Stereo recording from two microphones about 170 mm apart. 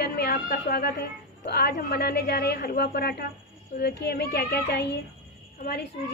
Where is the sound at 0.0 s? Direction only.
65° left (ahead or behind).